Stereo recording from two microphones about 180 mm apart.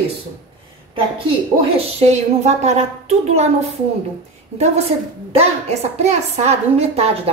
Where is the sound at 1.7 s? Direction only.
40° right (ahead or behind).